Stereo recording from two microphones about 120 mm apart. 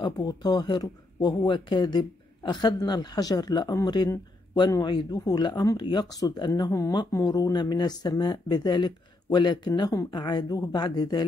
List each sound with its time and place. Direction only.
0.0 s speech: 35° left (ahead or behind)